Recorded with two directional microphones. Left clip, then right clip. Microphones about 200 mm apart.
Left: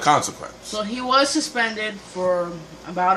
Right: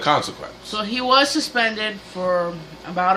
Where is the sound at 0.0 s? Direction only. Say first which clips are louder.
Left 1 dB; 25° left (ahead or behind).